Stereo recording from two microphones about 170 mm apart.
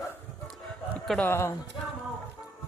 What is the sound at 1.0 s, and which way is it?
Speech, 10° left (ahead or behind).